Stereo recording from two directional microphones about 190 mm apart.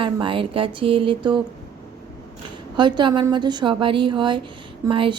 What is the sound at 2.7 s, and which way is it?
A woman's voice, 25° right (ahead or behind).